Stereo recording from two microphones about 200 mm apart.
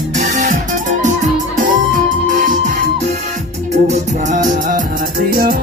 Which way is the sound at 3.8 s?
35° right (ahead or behind).